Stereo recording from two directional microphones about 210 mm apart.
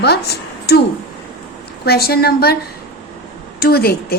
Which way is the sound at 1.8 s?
50° left (ahead or behind).